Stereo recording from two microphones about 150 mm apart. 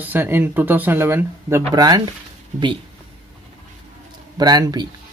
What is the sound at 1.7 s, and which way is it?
Speech, 25° right (ahead or behind).